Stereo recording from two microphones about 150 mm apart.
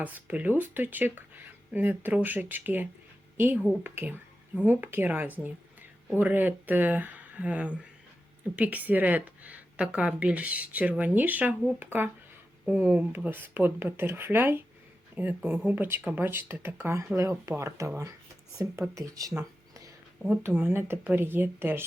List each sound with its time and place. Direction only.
0.0 s a woman's voice: 10° right (ahead or behind)
19.4 s a sound: 20° right (ahead or behind)
20.4 s speech: 15° right (ahead or behind)